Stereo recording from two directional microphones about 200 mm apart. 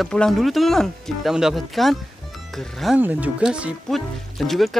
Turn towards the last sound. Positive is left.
turn(degrees=0)  # may be behind; listen again after turning